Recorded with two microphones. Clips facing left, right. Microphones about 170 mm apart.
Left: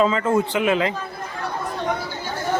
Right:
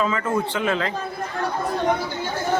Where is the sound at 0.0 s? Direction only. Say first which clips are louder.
Left 4 dB; 25° left (ahead or behind).